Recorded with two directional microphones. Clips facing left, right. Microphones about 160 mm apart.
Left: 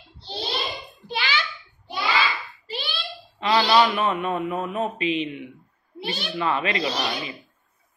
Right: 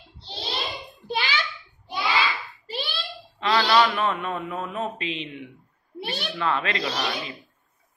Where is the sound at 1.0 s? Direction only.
45° right (ahead or behind).